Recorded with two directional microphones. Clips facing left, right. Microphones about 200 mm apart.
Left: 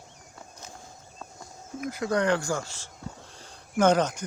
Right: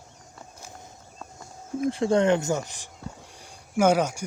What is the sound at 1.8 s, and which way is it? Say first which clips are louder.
Speech: right 5 dB; 30° right (ahead or behind).